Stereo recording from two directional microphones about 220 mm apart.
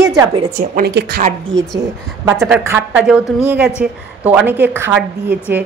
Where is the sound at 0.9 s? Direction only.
50° right (ahead or behind).